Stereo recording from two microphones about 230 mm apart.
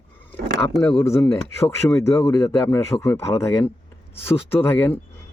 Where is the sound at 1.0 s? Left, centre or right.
Centre.